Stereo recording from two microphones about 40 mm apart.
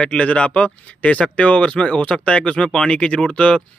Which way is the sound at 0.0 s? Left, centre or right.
Left.